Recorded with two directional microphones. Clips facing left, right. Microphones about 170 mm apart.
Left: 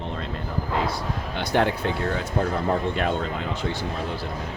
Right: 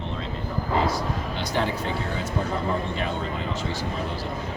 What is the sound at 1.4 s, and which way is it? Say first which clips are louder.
Speech: left 5 dB; 60° left (ahead or behind).